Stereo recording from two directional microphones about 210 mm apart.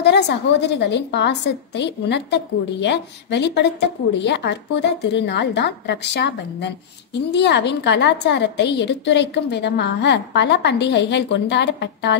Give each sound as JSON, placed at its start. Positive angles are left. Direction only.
{"t": 0.0, "sound": "a woman's voice", "side_deg": 50}